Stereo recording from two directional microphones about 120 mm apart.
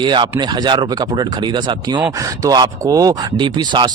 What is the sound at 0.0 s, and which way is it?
Speech, 40° right (ahead or behind).